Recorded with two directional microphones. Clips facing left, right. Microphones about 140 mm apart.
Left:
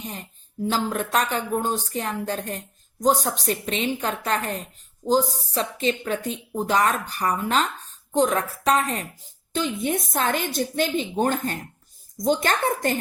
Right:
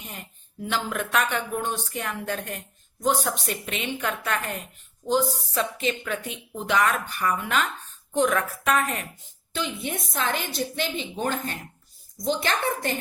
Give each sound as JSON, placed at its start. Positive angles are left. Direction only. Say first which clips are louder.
{"t": 0.6, "sound": "speech", "louder": "left 4 dB", "side_deg": 35}
{"t": 9.5, "sound": "a woman's voice", "louder": "left 5 dB", "side_deg": 40}